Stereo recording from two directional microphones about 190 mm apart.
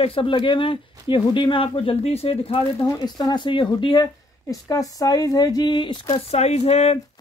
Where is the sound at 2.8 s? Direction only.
20° left (ahead or behind).